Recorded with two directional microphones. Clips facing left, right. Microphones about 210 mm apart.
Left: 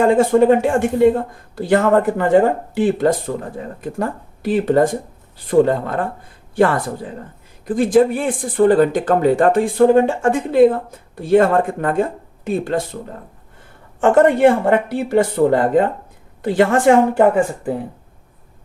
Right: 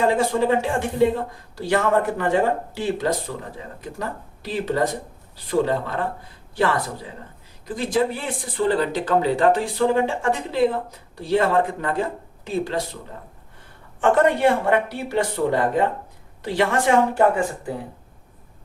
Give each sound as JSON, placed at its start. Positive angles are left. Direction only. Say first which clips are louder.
{"t": 0.0, "sound": "speech", "louder": "left 7 dB", "side_deg": 50}
{"t": 14.0, "sound": "speech", "louder": "left 6 dB", "side_deg": 50}